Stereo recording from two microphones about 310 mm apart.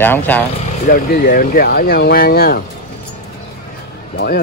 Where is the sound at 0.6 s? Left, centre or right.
Left.